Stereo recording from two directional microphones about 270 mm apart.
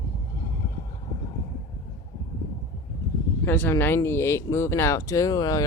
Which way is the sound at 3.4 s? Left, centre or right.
Centre.